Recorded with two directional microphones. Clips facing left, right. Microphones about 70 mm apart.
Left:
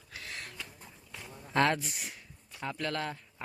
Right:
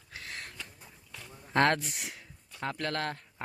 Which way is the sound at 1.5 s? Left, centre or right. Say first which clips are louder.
Right 2 dB; right.